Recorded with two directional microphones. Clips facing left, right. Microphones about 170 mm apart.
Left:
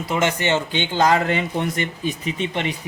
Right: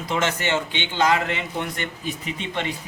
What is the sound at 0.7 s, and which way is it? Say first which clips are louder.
Speech: left 3 dB; 40° left (ahead or behind).